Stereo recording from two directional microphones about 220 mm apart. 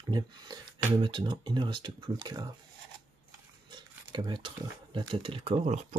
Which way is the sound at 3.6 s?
20° right (ahead or behind).